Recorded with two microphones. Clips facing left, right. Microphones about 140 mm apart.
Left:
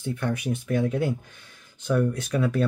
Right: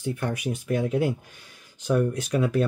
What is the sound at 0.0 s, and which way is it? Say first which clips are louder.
Speech: even; 5° right (ahead or behind).